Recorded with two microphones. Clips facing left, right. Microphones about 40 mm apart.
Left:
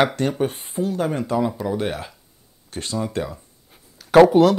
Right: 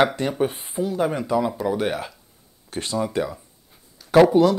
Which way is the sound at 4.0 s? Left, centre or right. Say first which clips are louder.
Left 3 dB; left.